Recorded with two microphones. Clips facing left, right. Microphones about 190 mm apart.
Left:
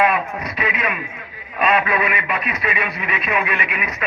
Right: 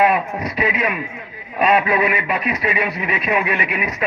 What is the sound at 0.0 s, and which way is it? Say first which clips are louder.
Speech: right 2 dB; 35° right (ahead or behind).